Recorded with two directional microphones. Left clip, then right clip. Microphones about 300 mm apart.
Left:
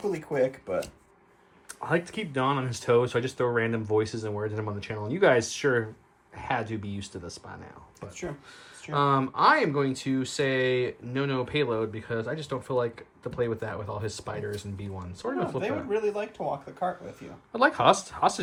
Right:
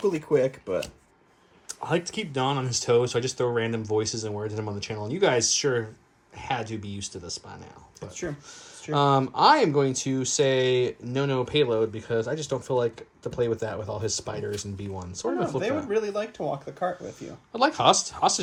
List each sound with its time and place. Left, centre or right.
0.3 s speech: right
1.6 s speech: centre
8.9 s speech: centre
15.9 s speech: right
17.5 s speech: centre